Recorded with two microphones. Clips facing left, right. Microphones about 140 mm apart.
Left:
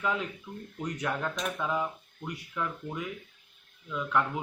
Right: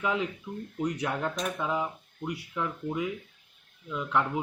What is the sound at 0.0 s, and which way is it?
Speech, 20° right (ahead or behind).